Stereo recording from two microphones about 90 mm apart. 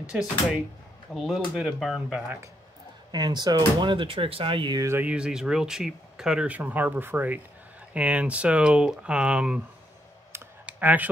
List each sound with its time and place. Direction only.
1.1 s speech: centre (ahead or behind)
3.1 s speech: 50° right (ahead or behind)
3.9 s speech: 75° right (ahead or behind)
4.9 s speech: 15° right (ahead or behind)
10.6 s computer keyboard: 15° right (ahead or behind)